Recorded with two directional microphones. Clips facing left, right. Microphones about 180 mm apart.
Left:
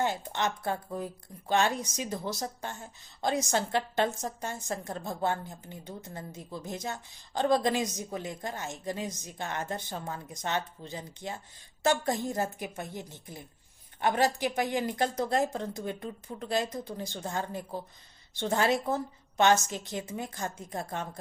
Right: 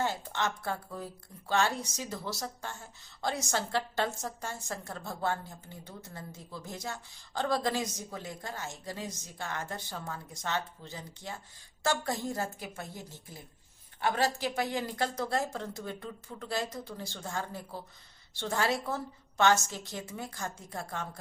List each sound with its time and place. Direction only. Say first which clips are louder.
0.0 s a woman's voice: left 2 dB; 20° left (ahead or behind)